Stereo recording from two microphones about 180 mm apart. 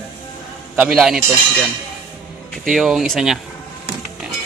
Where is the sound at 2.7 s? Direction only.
Centre (ahead or behind).